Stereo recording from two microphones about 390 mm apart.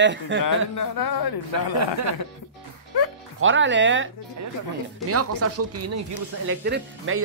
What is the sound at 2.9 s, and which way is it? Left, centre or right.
Music, left.